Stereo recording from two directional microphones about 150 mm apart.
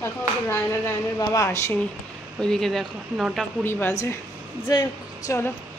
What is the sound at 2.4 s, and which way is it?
A woman's voice, 5° left (ahead or behind).